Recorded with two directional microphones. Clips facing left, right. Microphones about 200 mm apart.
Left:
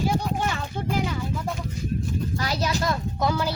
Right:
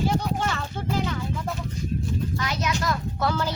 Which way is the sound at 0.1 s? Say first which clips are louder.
Even; 10° left (ahead or behind).